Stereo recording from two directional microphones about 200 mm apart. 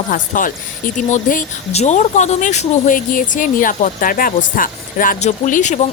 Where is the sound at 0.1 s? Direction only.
40° left (ahead or behind).